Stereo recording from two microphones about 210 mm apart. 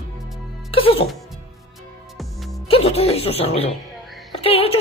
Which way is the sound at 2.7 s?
30° left (ahead or behind).